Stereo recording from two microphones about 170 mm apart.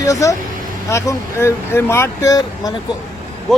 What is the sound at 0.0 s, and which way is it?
Speech, 20° left (ahead or behind).